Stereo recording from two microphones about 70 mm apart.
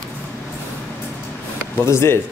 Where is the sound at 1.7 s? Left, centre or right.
Left.